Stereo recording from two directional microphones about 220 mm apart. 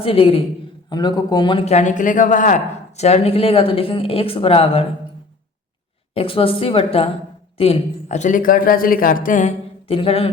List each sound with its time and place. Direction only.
0.0 s a man's voice: 25° left (ahead or behind)
6.1 s a man's voice: 25° left (ahead or behind)
9.9 s a man's voice: 25° left (ahead or behind)